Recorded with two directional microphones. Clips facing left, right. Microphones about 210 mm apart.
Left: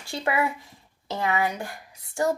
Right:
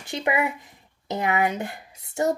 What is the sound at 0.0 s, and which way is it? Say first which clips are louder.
A woman's voice: right 1 dB; 20° right (ahead or behind).